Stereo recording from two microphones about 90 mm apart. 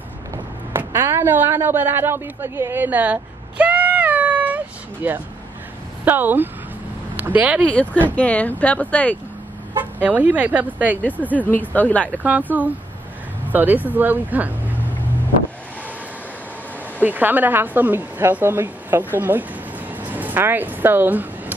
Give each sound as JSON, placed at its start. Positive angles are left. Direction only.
{"t": 0.7, "sound": "a sound", "side_deg": -30}
{"t": 6.0, "sound": "a woman's voice", "side_deg": -20}
{"t": 7.7, "sound": "speech", "side_deg": 15}
{"t": 9.9, "sound": "a woman's voice", "side_deg": -20}
{"t": 11.3, "sound": "speech", "side_deg": 20}
{"t": 12.2, "sound": "a woman's voice", "side_deg": -20}
{"t": 17.0, "sound": "a woman's voice", "side_deg": -20}
{"t": 20.0, "sound": "a sound", "side_deg": -20}